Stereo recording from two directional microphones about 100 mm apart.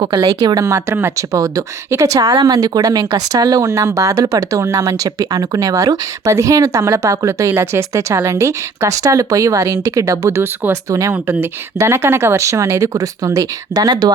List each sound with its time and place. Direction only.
0.0 s speech: 50° right (ahead or behind)
0.3 s speech: 40° right (ahead or behind)
11.1 s speech: 25° right (ahead or behind); by 14.1 s 40° right (ahead or behind)